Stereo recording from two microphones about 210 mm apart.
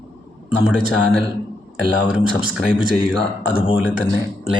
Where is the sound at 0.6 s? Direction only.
Centre (ahead or behind).